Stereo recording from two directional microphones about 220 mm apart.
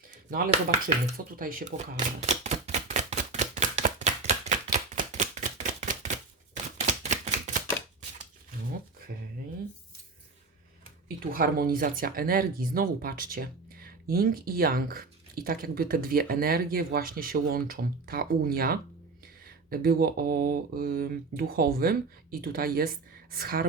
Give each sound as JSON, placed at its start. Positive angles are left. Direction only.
{"t": 0.3, "sound": "speech", "side_deg": -40}
{"t": 1.0, "sound": "shuffling cards", "side_deg": -40}
{"t": 6.8, "sound": "a sound", "side_deg": -30}
{"t": 11.3, "sound": "speech", "side_deg": -40}